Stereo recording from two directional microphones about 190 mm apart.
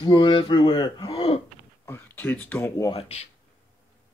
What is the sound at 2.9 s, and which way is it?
Speech, 30° left (ahead or behind).